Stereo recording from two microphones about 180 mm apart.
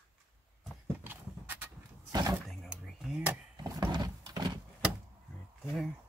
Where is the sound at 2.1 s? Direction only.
20° right (ahead or behind).